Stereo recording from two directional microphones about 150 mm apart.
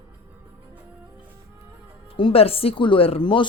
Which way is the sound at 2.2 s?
40° left (ahead or behind).